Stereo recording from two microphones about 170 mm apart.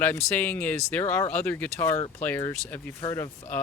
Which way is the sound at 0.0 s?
15° left (ahead or behind).